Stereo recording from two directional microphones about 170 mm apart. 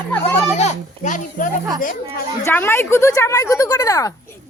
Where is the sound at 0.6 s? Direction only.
50° left (ahead or behind).